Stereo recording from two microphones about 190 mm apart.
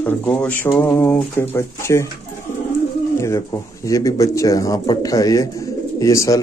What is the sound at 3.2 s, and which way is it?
Speech, 15° left (ahead or behind).